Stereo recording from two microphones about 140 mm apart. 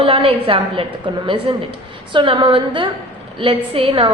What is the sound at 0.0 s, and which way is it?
A woman's voice, 40° right (ahead or behind).